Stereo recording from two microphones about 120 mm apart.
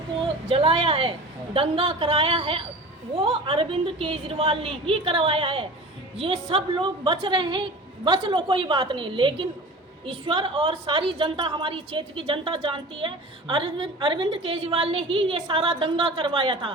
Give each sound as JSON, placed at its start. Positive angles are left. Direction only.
{"t": 0.5, "sound": "a woman's voice", "side_deg": -50}